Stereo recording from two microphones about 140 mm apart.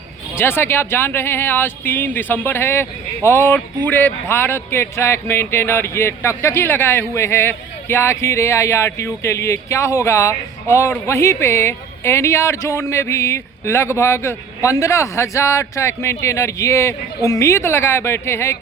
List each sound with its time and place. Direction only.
0.3 s speech: 15° left (ahead or behind)